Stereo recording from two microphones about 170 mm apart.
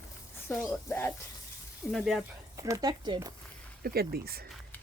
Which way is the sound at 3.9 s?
65° right (ahead or behind).